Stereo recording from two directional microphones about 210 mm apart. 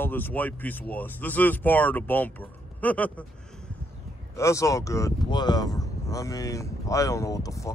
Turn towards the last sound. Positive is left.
turn(degrees=15)  # may be behind; listen again after turning